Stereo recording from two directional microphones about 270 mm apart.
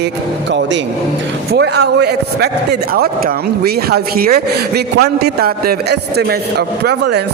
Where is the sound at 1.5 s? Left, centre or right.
Right.